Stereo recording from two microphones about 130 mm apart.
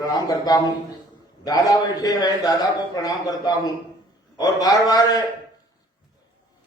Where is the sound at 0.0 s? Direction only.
30° left (ahead or behind).